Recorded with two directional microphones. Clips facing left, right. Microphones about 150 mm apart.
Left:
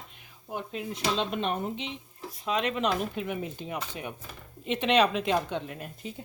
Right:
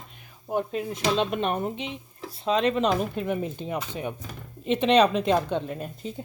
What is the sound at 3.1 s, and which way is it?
Speech, 40° right (ahead or behind).